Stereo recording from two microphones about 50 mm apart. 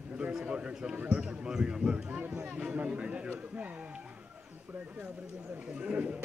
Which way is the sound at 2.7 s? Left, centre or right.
Right.